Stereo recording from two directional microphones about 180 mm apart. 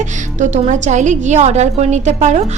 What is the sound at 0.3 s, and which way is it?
A woman's voice, 45° right (ahead or behind).